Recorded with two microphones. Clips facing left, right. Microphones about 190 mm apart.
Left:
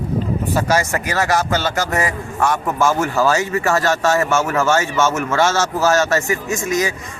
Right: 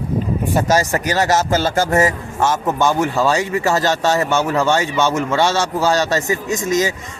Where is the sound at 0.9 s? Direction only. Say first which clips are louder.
Right 2 dB; 20° right (ahead or behind).